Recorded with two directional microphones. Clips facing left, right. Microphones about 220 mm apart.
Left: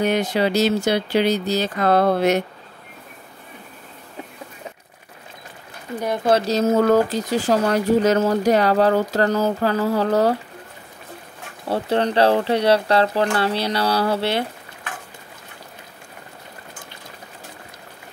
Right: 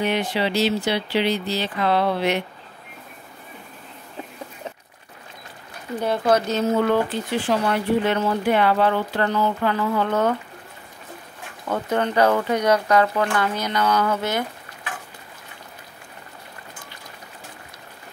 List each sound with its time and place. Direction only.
0.0 s speech: 40° left (ahead or behind)
5.9 s speech: 15° left (ahead or behind)
6.2 s speech: 30° left (ahead or behind)
11.6 s speech: 35° left (ahead or behind)